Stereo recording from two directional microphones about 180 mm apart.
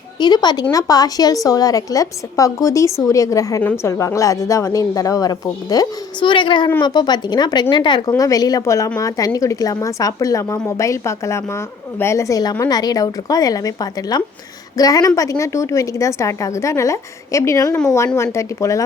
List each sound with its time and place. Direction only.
0.2 s a woman's voice: 25° left (ahead or behind)